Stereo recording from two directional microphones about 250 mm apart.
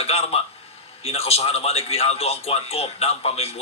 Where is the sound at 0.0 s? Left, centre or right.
Left.